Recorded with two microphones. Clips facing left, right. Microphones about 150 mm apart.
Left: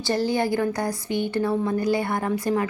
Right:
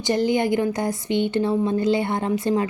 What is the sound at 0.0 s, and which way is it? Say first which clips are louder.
A woman's voice: right 3 dB; 20° right (ahead or behind).